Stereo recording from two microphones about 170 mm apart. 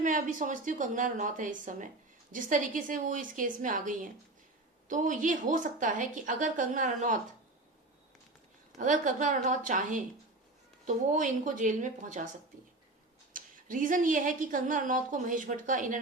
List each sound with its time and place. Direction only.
0.0 s a woman's voice: 50° right (ahead or behind)
8.8 s a woman's voice: 50° right (ahead or behind)
13.3 s a woman's voice: 50° right (ahead or behind)